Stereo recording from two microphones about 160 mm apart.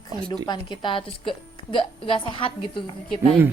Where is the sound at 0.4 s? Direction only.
30° left (ahead or behind).